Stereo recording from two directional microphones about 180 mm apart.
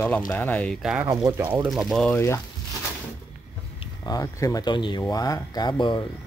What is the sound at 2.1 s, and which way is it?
Speech, 15° left (ahead or behind).